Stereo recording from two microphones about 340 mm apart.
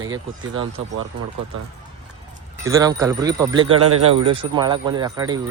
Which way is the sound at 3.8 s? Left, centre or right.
Right.